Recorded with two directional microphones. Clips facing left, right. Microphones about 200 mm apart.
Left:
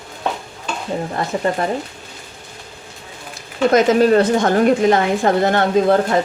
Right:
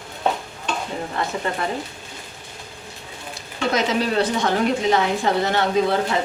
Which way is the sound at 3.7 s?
50° left (ahead or behind).